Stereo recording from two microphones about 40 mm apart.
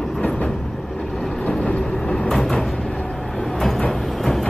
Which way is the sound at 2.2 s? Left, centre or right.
Centre.